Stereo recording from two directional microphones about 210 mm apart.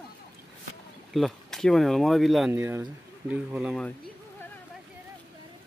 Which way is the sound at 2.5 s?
10° right (ahead or behind).